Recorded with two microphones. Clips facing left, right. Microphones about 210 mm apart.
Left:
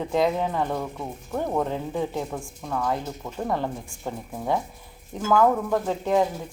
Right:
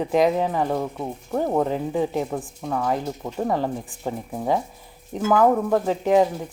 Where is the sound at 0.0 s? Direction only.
15° right (ahead or behind).